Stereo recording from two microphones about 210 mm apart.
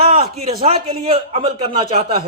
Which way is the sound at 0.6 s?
25° right (ahead or behind).